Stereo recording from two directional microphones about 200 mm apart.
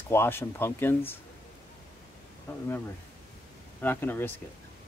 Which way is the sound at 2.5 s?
10° left (ahead or behind).